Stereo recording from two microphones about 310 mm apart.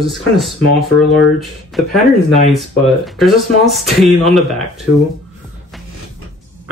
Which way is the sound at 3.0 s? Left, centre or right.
Centre.